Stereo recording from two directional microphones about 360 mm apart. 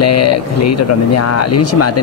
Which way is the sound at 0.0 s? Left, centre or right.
Left.